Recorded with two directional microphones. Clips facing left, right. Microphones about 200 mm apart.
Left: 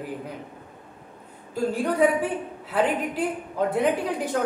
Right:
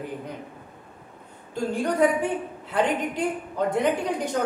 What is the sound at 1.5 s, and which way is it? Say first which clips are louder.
A woman's voice: left 1 dB; 5° left (ahead or behind).